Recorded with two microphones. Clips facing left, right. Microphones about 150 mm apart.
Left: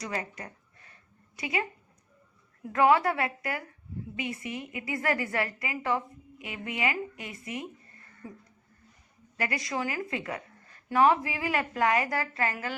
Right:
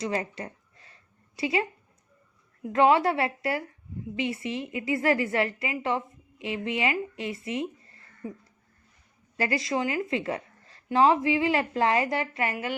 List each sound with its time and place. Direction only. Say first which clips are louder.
0.0 s a woman's voice: right 5 dB; 25° right (ahead or behind)
2.7 s a woman's voice: right 2 dB; 25° right (ahead or behind)
9.4 s a woman's voice: right 5 dB; 30° right (ahead or behind)